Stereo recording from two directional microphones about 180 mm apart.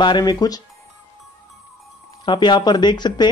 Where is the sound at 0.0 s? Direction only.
25° left (ahead or behind).